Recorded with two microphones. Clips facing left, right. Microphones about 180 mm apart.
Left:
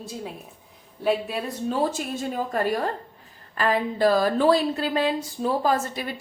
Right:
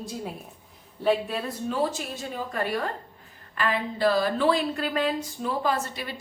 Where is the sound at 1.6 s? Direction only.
45° left (ahead or behind).